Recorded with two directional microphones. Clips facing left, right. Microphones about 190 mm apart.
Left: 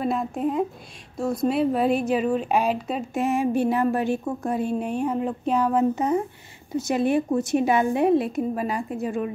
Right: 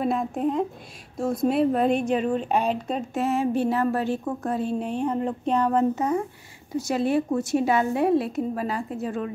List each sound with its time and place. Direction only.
0.0 s speech: centre (ahead or behind)
5.9 s speech: 20° left (ahead or behind)